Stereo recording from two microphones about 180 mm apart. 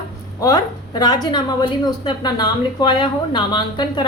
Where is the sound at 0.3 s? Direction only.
20° left (ahead or behind).